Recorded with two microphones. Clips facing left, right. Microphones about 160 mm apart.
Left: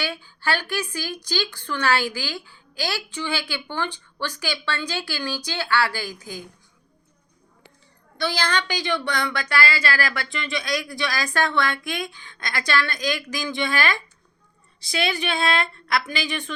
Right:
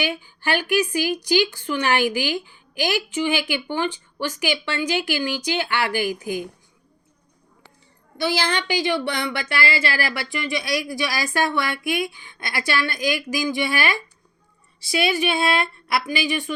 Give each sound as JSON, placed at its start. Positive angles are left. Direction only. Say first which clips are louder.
{"t": 0.0, "sound": "a woman's voice", "louder": "right 2 dB", "side_deg": -15}
{"t": 8.2, "sound": "a woman's voice", "louder": "right 2 dB", "side_deg": -15}